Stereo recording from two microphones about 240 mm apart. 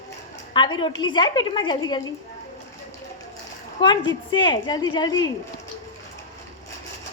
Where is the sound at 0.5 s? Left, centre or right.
Centre.